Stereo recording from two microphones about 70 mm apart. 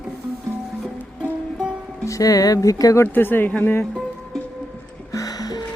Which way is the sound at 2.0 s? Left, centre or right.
Left.